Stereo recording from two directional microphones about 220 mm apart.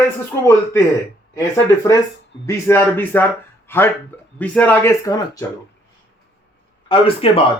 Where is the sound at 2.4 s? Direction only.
10° left (ahead or behind).